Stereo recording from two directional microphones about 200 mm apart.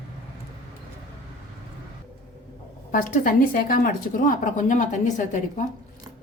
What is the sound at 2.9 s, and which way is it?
A woman's voice, 45° left (ahead or behind).